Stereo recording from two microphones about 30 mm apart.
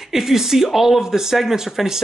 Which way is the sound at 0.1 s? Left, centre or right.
Centre.